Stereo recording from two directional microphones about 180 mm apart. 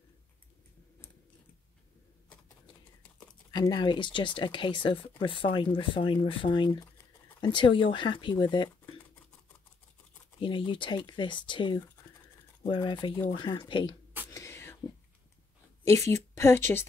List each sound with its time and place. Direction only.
3.5 s speech: 25° left (ahead or behind)
10.4 s speech: 30° left (ahead or behind)
14.3 s whispering: 15° left (ahead or behind)
15.8 s speech: 15° left (ahead or behind)